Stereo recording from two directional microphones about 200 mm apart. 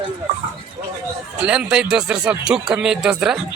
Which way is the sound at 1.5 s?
5° right (ahead or behind).